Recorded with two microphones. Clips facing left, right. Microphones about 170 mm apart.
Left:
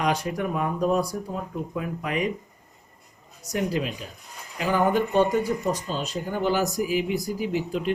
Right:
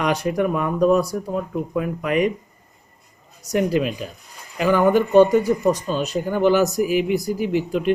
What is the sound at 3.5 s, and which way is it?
Speech, 65° right (ahead or behind).